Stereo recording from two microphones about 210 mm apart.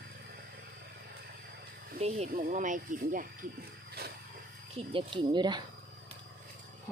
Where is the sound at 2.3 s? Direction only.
40° right (ahead or behind).